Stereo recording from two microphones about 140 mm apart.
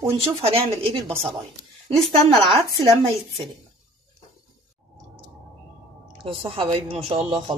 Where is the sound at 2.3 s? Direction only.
40° right (ahead or behind).